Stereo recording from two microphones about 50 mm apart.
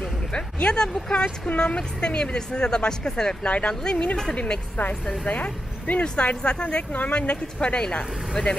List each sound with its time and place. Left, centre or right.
0.7 s speech: centre
1.5 s speech: left
5.2 s speech: left